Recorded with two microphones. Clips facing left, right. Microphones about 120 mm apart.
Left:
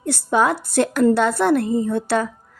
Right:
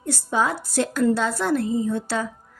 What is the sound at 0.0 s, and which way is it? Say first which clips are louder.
Speech: left 5 dB; 70° left (ahead or behind).